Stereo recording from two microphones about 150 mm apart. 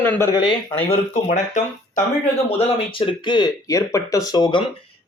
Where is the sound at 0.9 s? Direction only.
50° left (ahead or behind).